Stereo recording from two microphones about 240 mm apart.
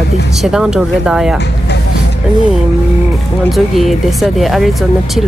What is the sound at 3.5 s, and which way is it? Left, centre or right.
Speech, centre.